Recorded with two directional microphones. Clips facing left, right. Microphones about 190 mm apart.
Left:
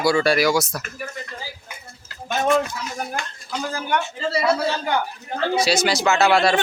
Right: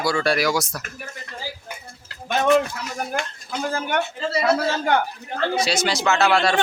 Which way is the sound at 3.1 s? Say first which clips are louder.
Right 2 dB; 55° right (ahead or behind).